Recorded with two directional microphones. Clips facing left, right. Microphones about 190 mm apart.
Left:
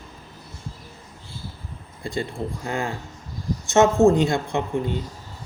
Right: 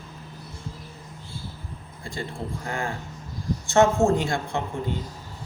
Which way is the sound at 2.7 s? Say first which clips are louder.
Left 2 dB; 20° left (ahead or behind).